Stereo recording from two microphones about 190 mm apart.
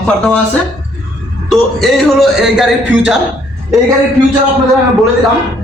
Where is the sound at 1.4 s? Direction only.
Centre (ahead or behind).